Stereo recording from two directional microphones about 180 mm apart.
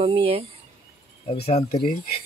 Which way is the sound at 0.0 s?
35° right (ahead or behind).